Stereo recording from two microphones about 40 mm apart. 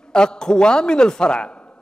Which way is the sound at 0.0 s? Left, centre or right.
Centre.